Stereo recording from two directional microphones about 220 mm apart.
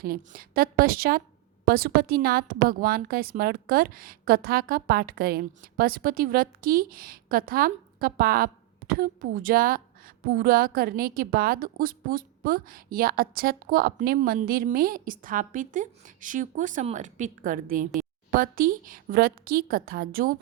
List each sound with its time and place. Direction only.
0.0 s a woman's voice: 40° right (ahead or behind)